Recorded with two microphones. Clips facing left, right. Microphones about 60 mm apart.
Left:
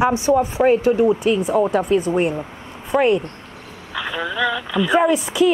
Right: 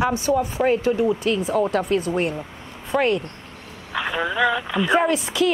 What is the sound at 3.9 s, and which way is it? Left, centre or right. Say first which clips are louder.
Speech: right 1 dB; centre.